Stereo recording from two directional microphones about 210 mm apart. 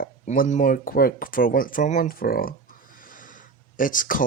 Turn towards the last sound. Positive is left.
turn(degrees=40)  # may be behind; listen again after turning